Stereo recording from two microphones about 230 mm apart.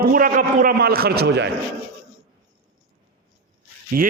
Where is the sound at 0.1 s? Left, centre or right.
Right.